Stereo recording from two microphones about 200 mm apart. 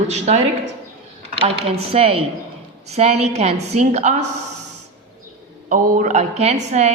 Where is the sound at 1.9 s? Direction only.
25° right (ahead or behind).